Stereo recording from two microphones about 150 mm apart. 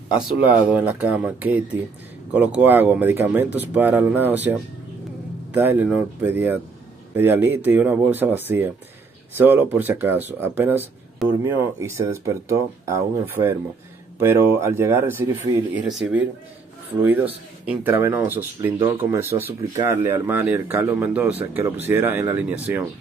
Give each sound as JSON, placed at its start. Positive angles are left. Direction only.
{"t": 0.1, "sound": "speech", "side_deg": -10}